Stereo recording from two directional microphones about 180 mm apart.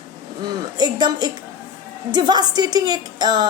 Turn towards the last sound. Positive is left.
turn(degrees=-25)  # may be behind; listen again after turning